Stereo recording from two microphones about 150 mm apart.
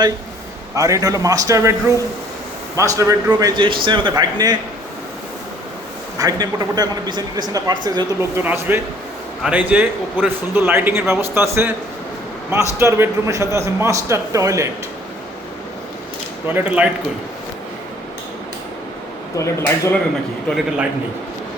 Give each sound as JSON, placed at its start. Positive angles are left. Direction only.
{"t": 0.8, "sound": "a man's voice", "side_deg": -20}
{"t": 2.7, "sound": "a man's voice", "side_deg": -20}
{"t": 6.1, "sound": "a man's voice", "side_deg": -25}
{"t": 8.2, "sound": "a man's voice", "side_deg": -15}
{"t": 12.5, "sound": "a man's voice", "side_deg": -20}
{"t": 16.6, "sound": "a man's voice", "side_deg": -10}
{"t": 19.4, "sound": "speech", "side_deg": 20}
{"t": 20.5, "sound": "a man's voice", "side_deg": 0}